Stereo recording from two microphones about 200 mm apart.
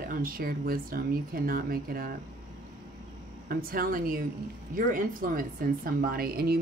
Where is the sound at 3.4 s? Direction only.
45° right (ahead or behind).